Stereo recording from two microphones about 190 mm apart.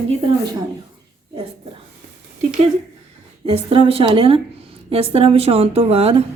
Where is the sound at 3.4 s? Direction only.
30° right (ahead or behind).